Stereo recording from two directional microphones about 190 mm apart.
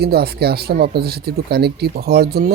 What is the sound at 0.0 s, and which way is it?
Speech, 55° right (ahead or behind).